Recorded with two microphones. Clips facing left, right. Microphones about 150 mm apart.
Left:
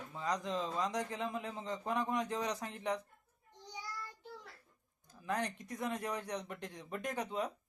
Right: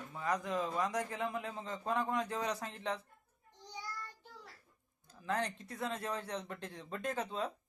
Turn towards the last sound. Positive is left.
turn(degrees=20)  # may be behind; listen again after turning